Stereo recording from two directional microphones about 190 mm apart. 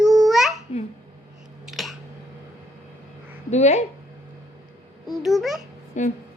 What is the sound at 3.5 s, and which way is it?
Speech, 35° left (ahead or behind).